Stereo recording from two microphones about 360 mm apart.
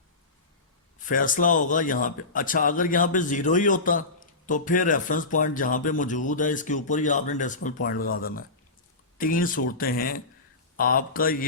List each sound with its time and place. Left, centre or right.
1.0 s speech: left